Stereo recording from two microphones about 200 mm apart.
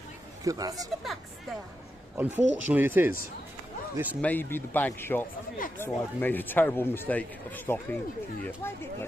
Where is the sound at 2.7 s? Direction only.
10° right (ahead or behind).